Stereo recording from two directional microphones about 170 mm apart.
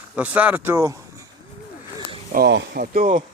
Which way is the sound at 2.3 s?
80° right.